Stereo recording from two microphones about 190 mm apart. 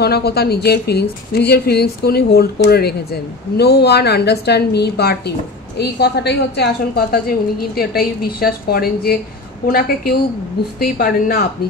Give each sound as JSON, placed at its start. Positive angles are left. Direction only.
{"t": 0.0, "sound": "a woman's voice", "side_deg": 55}